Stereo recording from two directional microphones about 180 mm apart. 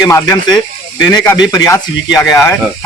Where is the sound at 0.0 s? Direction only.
20° left (ahead or behind).